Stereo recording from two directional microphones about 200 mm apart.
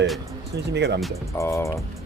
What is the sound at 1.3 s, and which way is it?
Speech, 15° left (ahead or behind).